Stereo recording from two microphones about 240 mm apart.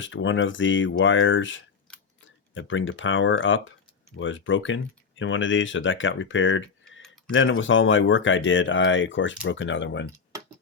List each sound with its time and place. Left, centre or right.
0.0 s speech: left